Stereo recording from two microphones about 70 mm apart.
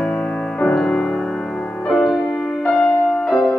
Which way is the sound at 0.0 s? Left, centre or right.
Centre.